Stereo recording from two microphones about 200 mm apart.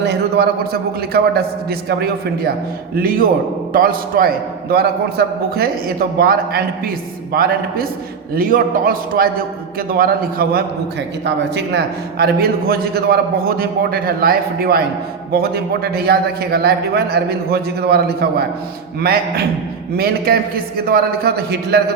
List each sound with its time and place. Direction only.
0.0 s a man's voice: 55° right (ahead or behind)
8.4 s a man's voice: 45° right (ahead or behind)